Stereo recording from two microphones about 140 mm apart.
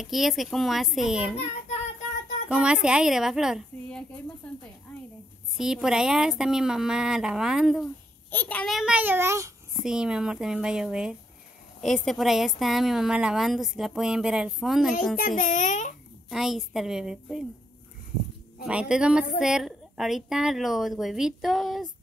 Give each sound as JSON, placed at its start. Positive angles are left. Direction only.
{"t": 0.0, "sound": "a woman's voice", "side_deg": 0}
{"t": 2.5, "sound": "a woman's voice", "side_deg": -5}
{"t": 5.6, "sound": "a woman's voice", "side_deg": -5}
{"t": 8.3, "sound": "a child's voice", "side_deg": 10}
{"t": 8.7, "sound": "a child's voice", "side_deg": -5}
{"t": 9.8, "sound": "a woman's voice", "side_deg": -5}
{"t": 15.1, "sound": "a child's voice", "side_deg": 75}
{"t": 16.3, "sound": "a woman's voice", "side_deg": 0}
{"t": 18.7, "sound": "a child's voice", "side_deg": -5}